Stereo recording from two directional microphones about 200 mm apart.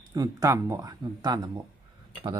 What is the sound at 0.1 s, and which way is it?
Speech, 20° right (ahead or behind).